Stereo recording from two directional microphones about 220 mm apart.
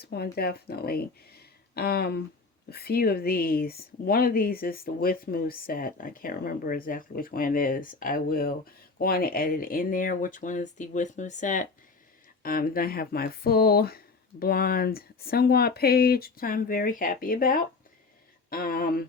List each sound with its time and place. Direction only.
0.0 s speech: 45° left (ahead or behind)